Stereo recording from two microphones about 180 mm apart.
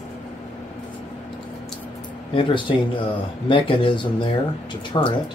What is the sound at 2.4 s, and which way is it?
Speech, 25° left (ahead or behind).